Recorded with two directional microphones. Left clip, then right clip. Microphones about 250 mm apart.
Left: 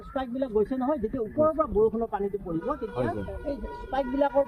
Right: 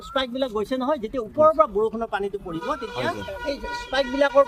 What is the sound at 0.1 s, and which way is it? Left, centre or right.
Speech, right.